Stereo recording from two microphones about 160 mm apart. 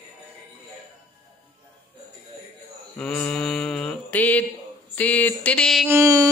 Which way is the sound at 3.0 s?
5° left (ahead or behind).